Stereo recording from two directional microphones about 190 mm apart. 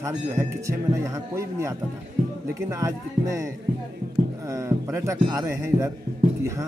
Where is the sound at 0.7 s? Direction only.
15° right (ahead or behind).